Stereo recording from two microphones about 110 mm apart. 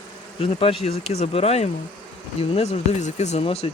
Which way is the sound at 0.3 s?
60° left (ahead or behind).